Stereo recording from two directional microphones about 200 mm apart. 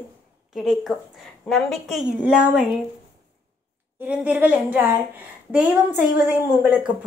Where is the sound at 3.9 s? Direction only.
5° right (ahead or behind).